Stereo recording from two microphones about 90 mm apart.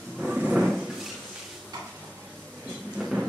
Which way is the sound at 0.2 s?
10° right (ahead or behind).